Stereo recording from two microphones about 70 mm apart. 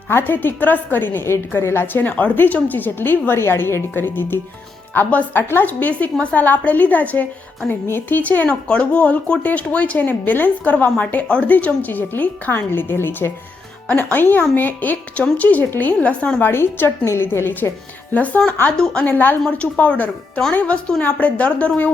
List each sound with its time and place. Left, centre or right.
0.1 s a woman's voice: left
16.4 s a woman's voice: left
18.1 s speech: centre